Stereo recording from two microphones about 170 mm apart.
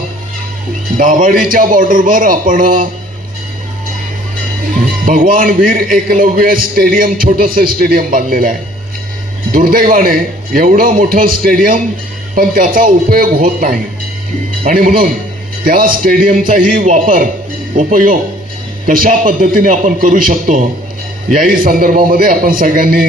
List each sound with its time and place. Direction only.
0.9 s a man's voice: 50° right (ahead or behind)
5.0 s a man's voice: 55° right (ahead or behind)